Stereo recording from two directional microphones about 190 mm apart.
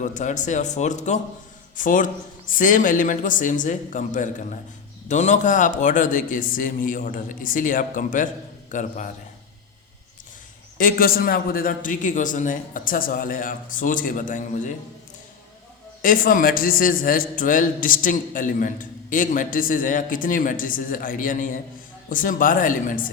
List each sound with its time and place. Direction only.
0.0 s a man's voice: 40° left (ahead or behind)
10.8 s a man's voice: 50° left (ahead or behind)
16.0 s a man's voice: 45° left (ahead or behind)